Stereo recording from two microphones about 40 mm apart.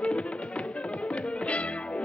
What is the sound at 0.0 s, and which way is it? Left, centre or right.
Music, left.